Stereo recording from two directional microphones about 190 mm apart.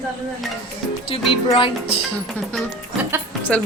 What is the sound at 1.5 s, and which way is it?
Speech, 30° left (ahead or behind).